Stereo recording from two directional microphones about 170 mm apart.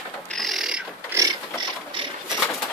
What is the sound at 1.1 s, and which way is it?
Ratchet, 25° right (ahead or behind).